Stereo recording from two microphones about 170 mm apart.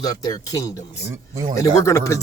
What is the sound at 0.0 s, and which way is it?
Speech, 20° left (ahead or behind).